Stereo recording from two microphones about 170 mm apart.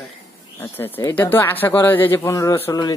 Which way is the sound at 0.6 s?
15° left (ahead or behind).